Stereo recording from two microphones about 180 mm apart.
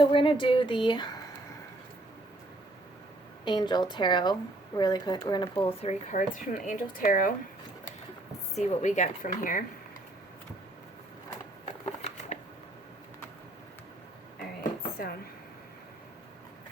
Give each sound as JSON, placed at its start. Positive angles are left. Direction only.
{"t": 0.0, "sound": "speech", "side_deg": 30}
{"t": 3.4, "sound": "speech", "side_deg": 25}
{"t": 8.5, "sound": "a woman's voice", "side_deg": 40}
{"t": 12.3, "sound": "camera", "side_deg": 40}
{"t": 14.6, "sound": "dishes", "side_deg": 55}